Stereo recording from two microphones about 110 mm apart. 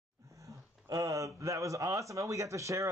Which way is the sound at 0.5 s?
30° right (ahead or behind).